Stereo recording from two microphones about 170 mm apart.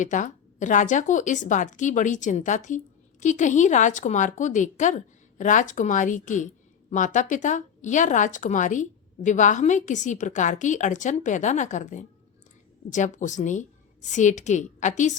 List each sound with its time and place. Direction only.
0.0 s a woman's voice: 45° left (ahead or behind)